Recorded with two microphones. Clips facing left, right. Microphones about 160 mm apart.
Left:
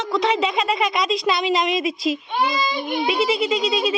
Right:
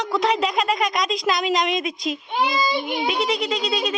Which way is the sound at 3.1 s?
5° left (ahead or behind).